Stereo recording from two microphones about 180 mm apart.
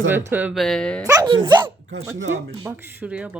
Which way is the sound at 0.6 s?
Centre (ahead or behind).